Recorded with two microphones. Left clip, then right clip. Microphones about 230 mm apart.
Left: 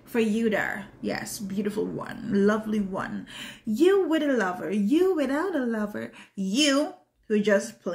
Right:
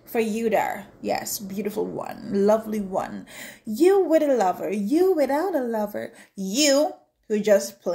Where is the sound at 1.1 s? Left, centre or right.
Centre.